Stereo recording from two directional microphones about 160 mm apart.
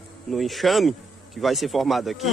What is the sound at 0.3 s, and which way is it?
A man's voice, centre (ahead or behind).